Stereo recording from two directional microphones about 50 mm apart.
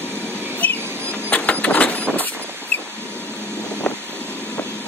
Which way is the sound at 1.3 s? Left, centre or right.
Left.